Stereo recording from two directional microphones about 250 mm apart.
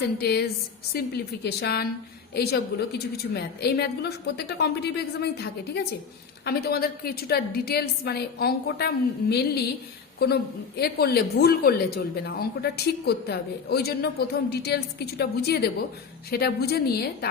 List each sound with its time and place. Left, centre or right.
0.2 s a woman's voice: left